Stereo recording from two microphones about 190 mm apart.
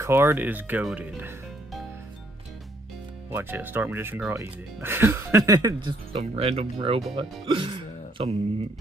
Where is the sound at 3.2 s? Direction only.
10° right (ahead or behind).